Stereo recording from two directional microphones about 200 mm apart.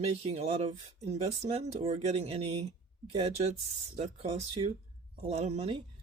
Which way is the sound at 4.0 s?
30° right (ahead or behind).